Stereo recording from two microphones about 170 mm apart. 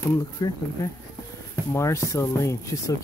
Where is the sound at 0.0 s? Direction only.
20° left (ahead or behind).